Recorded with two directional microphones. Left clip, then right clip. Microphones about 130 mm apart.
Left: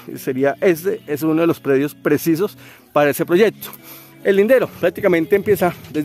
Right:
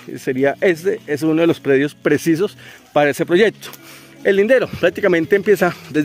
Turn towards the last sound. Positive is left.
turn(degrees=35)  # may be behind; listen again after turning